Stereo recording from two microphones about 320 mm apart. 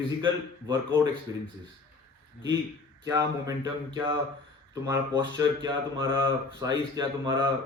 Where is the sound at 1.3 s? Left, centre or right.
Centre.